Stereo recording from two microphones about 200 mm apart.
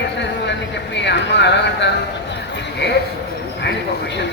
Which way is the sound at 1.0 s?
60° left (ahead or behind).